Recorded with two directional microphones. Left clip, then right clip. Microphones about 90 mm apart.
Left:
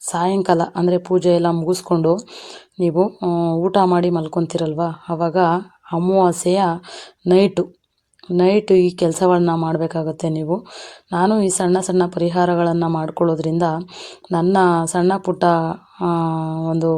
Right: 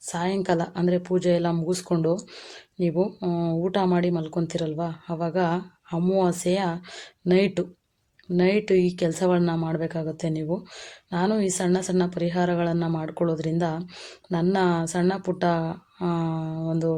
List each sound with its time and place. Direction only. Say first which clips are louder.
0.1 s a woman's voice: left 8 dB; 40° left (ahead or behind)
1.9 s a woman's voice: left 8 dB; 20° left (ahead or behind)
2.7 s speech: left 8 dB; 35° left (ahead or behind)
3.2 s a woman's voice: left 8 dB; 20° left (ahead or behind)
3.6 s speech: left 8 dB; 35° left (ahead or behind)
6.0 s a woman's voice: left 8 dB; 20° left (ahead or behind)
6.2 s speech: left 8 dB; 40° left (ahead or behind)
12.7 s a woman's voice: left 8 dB; 20° left (ahead or behind)
13.0 s a woman's voice: left 8 dB; 30° left (ahead or behind)